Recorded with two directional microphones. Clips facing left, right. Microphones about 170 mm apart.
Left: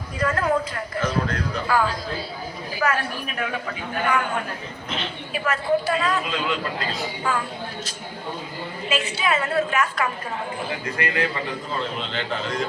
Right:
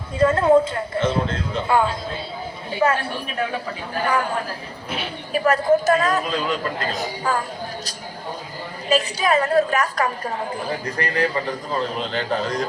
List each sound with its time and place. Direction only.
0.2 s a woman's voice: 25° right (ahead or behind)
8.9 s a woman's voice: 40° right (ahead or behind)